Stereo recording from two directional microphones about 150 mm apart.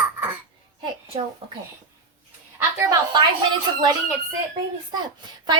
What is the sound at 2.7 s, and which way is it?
Speech, 20° right (ahead or behind).